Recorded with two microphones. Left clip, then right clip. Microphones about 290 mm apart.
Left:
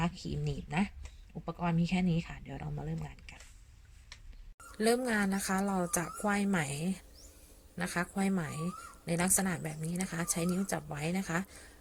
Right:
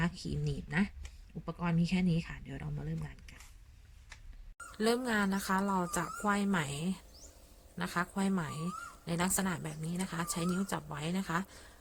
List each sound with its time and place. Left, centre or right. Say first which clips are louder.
0.0 s speech: left 1 dB; centre
4.8 s speech: left 1 dB; centre